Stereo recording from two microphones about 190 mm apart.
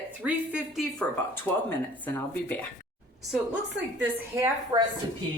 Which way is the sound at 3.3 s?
10° right (ahead or behind).